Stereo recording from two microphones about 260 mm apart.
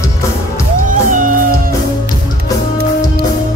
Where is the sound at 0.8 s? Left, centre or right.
Right.